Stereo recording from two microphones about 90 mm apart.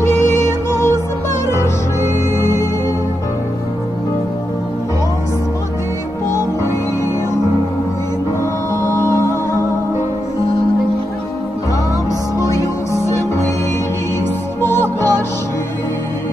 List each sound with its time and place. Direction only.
0.0 s music: 30° left (ahead or behind)
8.8 s music: 30° left (ahead or behind)
12.4 s music: 35° left (ahead or behind)
14.6 s music: 25° left (ahead or behind)